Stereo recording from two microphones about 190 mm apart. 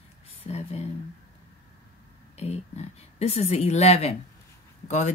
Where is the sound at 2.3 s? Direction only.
35° left (ahead or behind).